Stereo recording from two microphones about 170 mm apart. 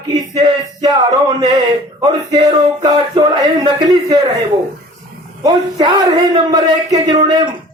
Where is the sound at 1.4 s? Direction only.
25° right (ahead or behind).